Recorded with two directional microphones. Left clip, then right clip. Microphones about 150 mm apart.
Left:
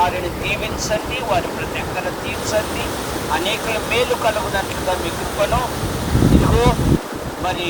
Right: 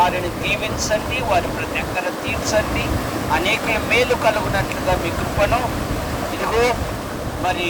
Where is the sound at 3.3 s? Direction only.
15° right (ahead or behind).